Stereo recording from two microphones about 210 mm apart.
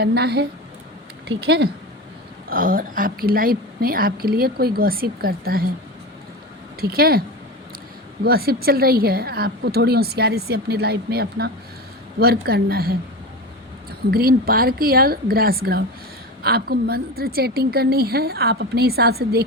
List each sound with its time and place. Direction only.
0.0 s a woman's voice: 50° right (ahead or behind)
2.5 s a woman's voice: 40° right (ahead or behind)
6.8 s a woman's voice: 45° right (ahead or behind)
14.1 s a woman's voice: 45° right (ahead or behind)